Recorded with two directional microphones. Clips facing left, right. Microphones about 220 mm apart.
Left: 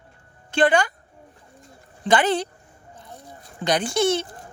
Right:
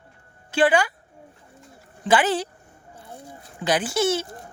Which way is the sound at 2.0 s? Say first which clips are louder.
Left 1 dB; 5° right (ahead or behind).